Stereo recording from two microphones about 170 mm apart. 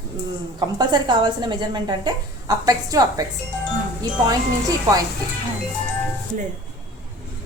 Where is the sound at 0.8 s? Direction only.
25° right (ahead or behind).